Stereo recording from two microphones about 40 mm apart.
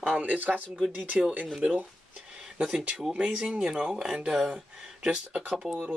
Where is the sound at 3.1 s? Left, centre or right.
Right; by 4.6 s centre.